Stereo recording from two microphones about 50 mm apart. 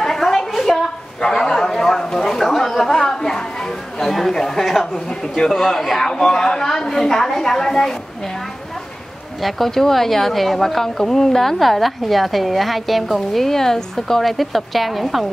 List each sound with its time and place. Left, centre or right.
0.0 s a sound: centre
4.0 s a man's voice: centre
9.4 s speech: centre